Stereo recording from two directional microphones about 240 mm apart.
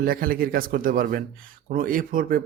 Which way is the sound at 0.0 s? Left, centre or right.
Right.